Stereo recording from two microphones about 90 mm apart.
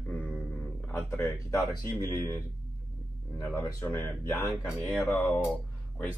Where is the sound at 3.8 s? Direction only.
30° left (ahead or behind).